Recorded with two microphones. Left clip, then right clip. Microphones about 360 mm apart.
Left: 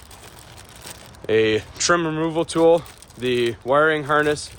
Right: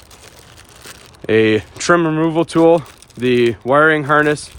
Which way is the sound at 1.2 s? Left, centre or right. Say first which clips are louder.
Right 5 dB; centre.